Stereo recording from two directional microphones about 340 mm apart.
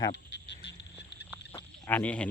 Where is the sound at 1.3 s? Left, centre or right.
Centre.